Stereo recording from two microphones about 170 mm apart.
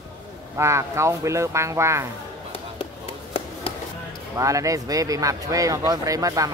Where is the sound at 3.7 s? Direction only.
30° left (ahead or behind).